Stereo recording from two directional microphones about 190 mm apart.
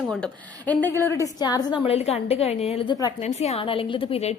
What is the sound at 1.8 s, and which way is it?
A woman's voice, 30° left (ahead or behind).